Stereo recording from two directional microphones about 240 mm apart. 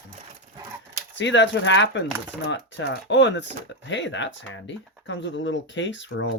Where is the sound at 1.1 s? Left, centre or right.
Left.